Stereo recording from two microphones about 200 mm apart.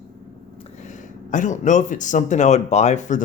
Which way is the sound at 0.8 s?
40° left (ahead or behind).